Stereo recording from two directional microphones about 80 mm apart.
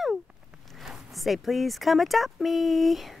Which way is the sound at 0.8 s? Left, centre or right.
Centre.